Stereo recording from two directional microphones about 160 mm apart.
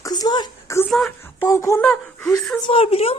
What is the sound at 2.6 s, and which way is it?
Speech, 35° left (ahead or behind).